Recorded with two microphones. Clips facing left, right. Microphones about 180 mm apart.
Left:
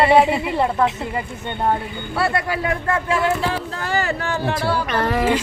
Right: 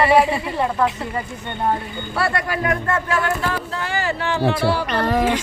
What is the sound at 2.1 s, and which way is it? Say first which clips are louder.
Speech: left 1 dB; 25° left (ahead or behind).